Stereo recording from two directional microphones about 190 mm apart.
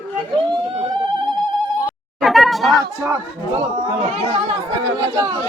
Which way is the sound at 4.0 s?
35° right (ahead or behind).